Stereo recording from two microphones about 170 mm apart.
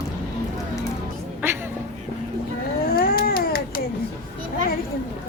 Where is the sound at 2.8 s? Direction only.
60° left (ahead or behind).